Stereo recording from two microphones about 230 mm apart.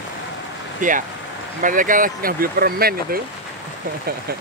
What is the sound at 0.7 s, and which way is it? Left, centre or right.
Speech, right.